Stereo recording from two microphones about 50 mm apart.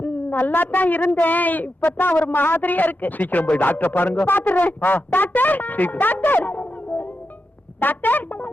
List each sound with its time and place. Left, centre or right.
0.0 s a woman's voice: left